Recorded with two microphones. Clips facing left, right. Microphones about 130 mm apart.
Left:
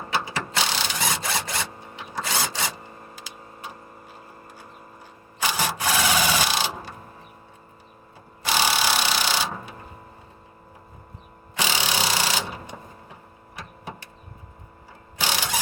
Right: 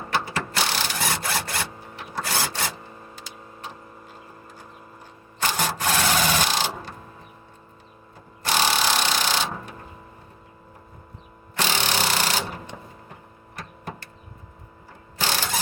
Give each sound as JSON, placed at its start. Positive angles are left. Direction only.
{"t": 0.1, "sound": "wood", "side_deg": 15}
{"t": 1.5, "sound": "rub", "side_deg": 20}
{"t": 3.2, "sound": "tick-tock", "side_deg": 10}
{"t": 5.4, "sound": "a sound", "side_deg": 10}
{"t": 8.4, "sound": "wood", "side_deg": 10}
{"t": 11.5, "sound": "tools", "side_deg": 10}
{"t": 13.6, "sound": "vehicle", "side_deg": 10}
{"t": 15.2, "sound": "mechanisms", "side_deg": 15}